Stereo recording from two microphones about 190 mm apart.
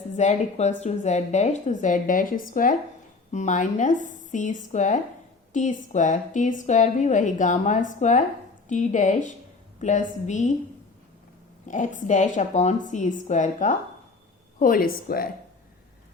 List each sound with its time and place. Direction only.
0.2 s a woman's voice: 35° left (ahead or behind)
11.7 s a woman's voice: 40° left (ahead or behind)